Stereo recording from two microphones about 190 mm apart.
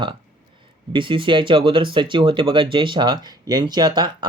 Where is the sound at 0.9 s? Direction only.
25° right (ahead or behind).